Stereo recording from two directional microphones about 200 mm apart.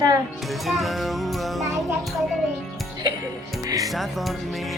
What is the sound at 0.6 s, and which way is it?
Speech, centre (ahead or behind).